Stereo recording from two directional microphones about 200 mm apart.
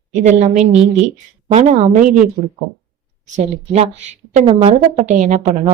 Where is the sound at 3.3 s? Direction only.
35° right (ahead or behind).